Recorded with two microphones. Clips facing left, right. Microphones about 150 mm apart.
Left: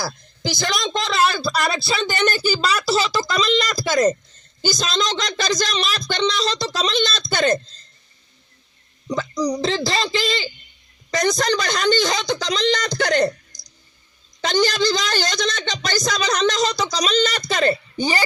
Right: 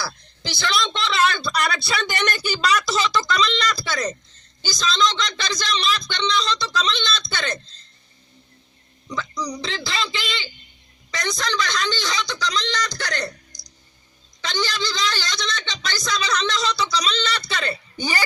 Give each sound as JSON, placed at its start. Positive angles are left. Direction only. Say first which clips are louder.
{"t": 0.0, "sound": "a woman's voice", "louder": "left 5 dB", "side_deg": 45}
{"t": 9.0, "sound": "a woman's voice", "louder": "left 7 dB", "side_deg": 45}
{"t": 14.4, "sound": "a woman's voice", "louder": "left 8 dB", "side_deg": 50}